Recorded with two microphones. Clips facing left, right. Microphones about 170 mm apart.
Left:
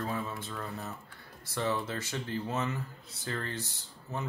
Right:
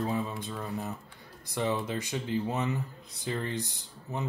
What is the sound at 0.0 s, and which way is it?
Speech, 20° right (ahead or behind).